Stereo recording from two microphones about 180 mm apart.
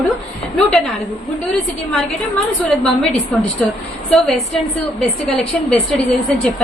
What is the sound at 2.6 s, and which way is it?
A woman's voice, centre (ahead or behind).